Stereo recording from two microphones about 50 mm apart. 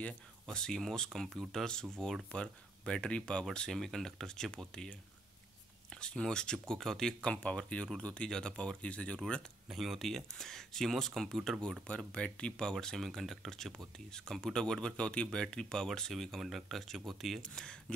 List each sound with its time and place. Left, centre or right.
0.5 s speech: centre
7.2 s speech: left
9.7 s speech: centre
12.1 s speech: left
12.8 s speech: centre
17.4 s speech: centre